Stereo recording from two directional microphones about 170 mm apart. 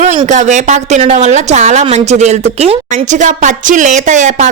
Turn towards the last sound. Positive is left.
turn(degrees=-45)  # may be behind; listen again after turning